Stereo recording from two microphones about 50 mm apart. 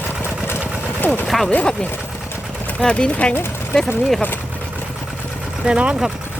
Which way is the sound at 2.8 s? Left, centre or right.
Left.